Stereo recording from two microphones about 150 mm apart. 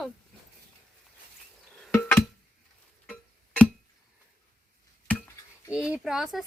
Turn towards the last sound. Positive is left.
turn(degrees=-5)  # may be behind; listen again after turning